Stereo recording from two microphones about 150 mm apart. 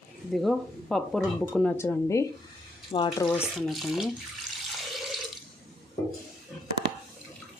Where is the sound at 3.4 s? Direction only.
Centre (ahead or behind).